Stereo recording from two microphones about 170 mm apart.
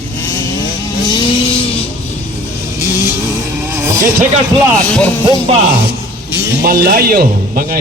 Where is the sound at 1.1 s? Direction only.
30° left (ahead or behind).